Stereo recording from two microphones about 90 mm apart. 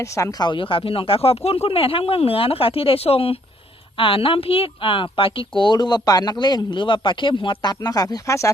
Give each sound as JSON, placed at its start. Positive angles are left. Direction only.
{"t": 0.0, "sound": "speech", "side_deg": 40}
{"t": 0.5, "sound": "a woman's voice", "side_deg": 80}